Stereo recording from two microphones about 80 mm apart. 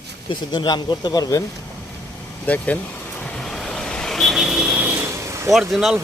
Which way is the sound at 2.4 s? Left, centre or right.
Centre.